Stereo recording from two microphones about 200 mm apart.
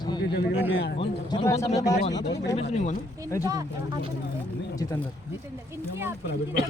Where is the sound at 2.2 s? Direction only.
60° left (ahead or behind).